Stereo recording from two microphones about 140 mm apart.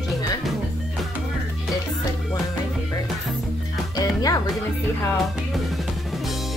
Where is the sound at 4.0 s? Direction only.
25° left (ahead or behind).